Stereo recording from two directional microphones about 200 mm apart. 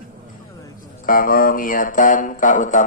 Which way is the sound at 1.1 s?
45° left (ahead or behind).